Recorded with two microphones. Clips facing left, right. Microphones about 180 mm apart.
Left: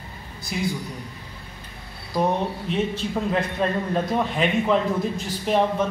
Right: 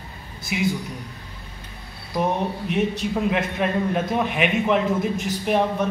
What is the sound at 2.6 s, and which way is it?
A man's voice, 15° right (ahead or behind).